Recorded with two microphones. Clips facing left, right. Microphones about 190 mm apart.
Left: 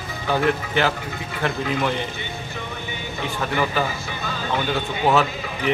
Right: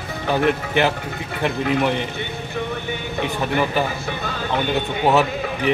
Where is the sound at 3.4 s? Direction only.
15° right (ahead or behind).